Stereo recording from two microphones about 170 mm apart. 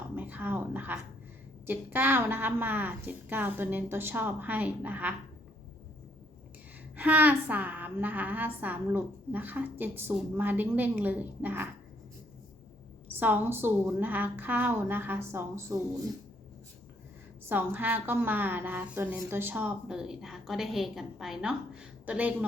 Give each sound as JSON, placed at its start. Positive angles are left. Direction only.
{"t": 0.2, "sound": "a woman's voice", "side_deg": -10}
{"t": 6.9, "sound": "a woman's voice", "side_deg": -10}
{"t": 13.1, "sound": "a woman's voice", "side_deg": -10}
{"t": 17.5, "sound": "a woman's voice", "side_deg": -10}